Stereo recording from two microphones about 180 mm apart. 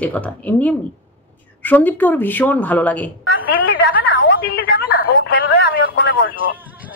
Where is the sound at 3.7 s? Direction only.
90° left.